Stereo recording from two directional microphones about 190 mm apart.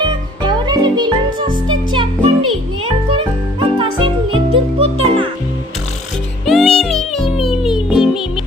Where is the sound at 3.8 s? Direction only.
25° right (ahead or behind).